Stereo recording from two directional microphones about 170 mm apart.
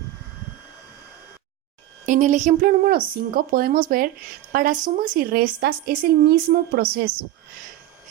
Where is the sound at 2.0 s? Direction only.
45° right (ahead or behind); by 7.0 s 70° right (ahead or behind).